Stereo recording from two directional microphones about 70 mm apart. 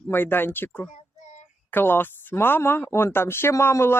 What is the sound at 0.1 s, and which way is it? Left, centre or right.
Speech, left.